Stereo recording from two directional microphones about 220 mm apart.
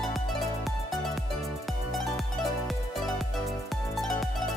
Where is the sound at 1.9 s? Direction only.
Centre (ahead or behind).